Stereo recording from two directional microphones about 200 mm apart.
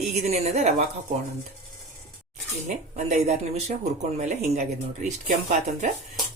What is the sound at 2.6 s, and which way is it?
Speech, 35° right (ahead or behind).